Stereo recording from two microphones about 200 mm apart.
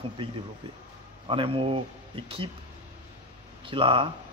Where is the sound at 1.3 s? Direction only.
25° right (ahead or behind).